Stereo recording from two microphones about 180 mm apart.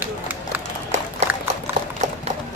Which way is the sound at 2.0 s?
40° right (ahead or behind).